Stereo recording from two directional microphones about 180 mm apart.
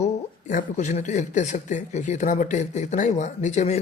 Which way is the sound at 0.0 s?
40° left (ahead or behind).